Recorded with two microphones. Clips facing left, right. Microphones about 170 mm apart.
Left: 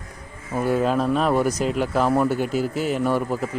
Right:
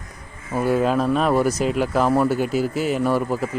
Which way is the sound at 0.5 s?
10° right (ahead or behind).